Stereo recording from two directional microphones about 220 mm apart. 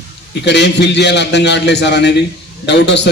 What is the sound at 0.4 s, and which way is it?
A man's voice, 50° left (ahead or behind).